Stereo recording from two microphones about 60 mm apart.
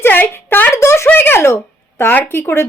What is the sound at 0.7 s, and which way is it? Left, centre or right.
Speech, left.